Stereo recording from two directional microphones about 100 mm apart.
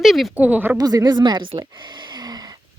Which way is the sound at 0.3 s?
15° right (ahead or behind).